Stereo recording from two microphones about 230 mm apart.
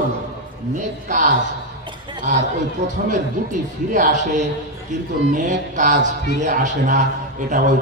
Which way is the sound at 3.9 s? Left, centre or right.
Right.